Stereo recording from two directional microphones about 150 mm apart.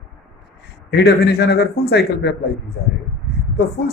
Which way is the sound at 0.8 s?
90° left.